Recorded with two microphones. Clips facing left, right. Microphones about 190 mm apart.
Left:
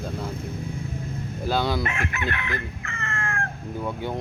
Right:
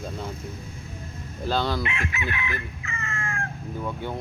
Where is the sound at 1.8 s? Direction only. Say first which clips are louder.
Left 2 dB; 50° left (ahead or behind).